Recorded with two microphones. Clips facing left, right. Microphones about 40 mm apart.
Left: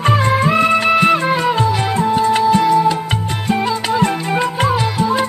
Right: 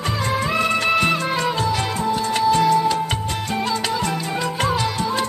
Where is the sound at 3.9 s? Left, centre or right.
Left.